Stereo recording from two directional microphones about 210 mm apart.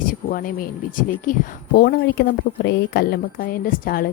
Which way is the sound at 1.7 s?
50° left (ahead or behind).